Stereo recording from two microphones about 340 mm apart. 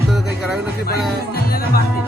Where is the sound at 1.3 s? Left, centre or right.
Left.